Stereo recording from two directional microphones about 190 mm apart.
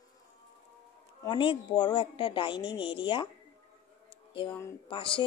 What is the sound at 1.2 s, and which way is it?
Speech, 25° left (ahead or behind).